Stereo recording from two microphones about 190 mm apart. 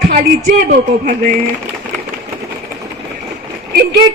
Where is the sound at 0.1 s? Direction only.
45° right (ahead or behind).